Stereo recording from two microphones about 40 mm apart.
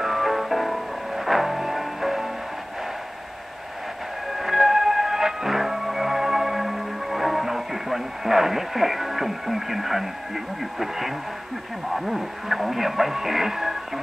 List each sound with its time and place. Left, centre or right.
0.0 s music: centre
4.4 s music: centre
11.9 s speech: centre